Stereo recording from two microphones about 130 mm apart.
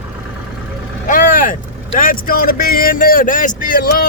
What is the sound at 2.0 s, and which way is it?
Speech, 90° left.